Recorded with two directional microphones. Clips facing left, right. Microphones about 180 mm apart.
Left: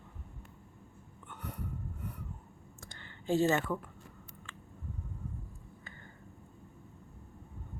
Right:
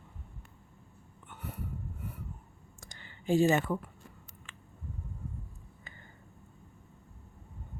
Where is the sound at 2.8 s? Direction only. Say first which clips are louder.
Right 2 dB; 15° right (ahead or behind).